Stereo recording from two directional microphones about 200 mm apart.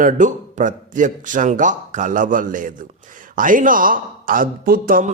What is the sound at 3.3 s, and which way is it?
Speech, 40° right (ahead or behind).